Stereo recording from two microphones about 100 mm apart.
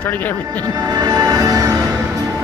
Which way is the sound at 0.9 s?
40° right (ahead or behind).